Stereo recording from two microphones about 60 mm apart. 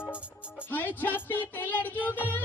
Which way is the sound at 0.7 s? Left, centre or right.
Left.